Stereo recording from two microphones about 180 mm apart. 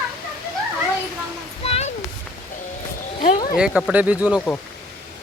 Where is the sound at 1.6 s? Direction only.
35° left (ahead or behind).